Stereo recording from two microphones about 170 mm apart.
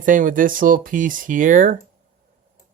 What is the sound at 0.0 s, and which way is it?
Speech, 50° right (ahead or behind).